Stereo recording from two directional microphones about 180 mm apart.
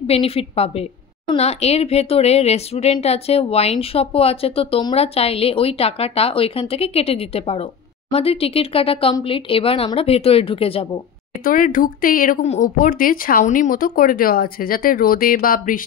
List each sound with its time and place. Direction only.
0.0 s a woman's voice: 35° left (ahead or behind)
11.4 s speech: 50° left (ahead or behind)